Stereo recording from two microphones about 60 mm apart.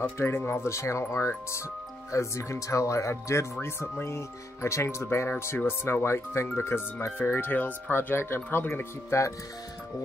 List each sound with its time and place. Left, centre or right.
0.2 s speech: left
3.6 s speech: left